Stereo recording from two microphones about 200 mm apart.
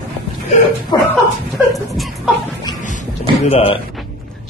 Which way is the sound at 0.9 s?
20° left (ahead or behind).